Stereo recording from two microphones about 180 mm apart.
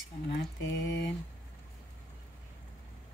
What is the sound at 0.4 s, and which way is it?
Mantra, 85° left.